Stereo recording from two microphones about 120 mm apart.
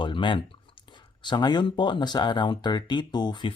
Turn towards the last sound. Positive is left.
turn(degrees=40)  # may be behind; listen again after turning